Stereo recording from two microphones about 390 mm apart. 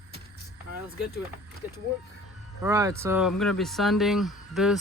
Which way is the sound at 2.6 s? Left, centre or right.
Centre.